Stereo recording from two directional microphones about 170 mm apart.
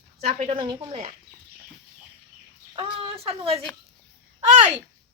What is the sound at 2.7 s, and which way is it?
Speech, 30° right (ahead or behind).